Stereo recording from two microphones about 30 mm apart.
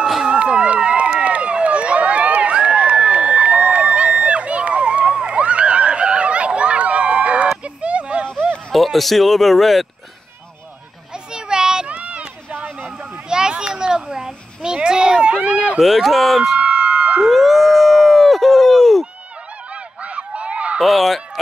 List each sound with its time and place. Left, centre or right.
0.3 s run: right
2.5 s crowd: right
7.6 s a sound: right
8.7 s speech: centre
11.3 s a sound: right
11.9 s run: right
13.3 s children playing: right
15.8 s speech: centre
16.5 s a sound: right
17.3 s a sound: centre
19.7 s honk: right
20.8 s speech: centre